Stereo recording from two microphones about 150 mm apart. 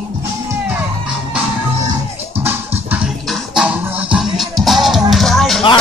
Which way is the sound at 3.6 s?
10° right (ahead or behind).